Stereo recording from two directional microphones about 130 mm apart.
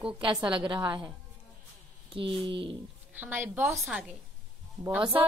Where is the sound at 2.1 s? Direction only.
40° right (ahead or behind).